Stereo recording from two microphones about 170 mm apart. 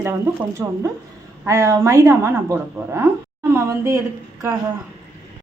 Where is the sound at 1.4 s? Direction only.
15° right (ahead or behind).